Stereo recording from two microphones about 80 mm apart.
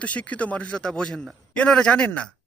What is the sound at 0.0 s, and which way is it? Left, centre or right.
A man's voice, centre.